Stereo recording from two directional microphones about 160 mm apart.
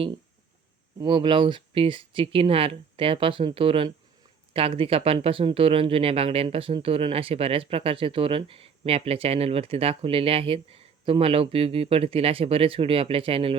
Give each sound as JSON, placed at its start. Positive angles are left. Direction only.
{"t": 0.9, "sound": "speech", "side_deg": -30}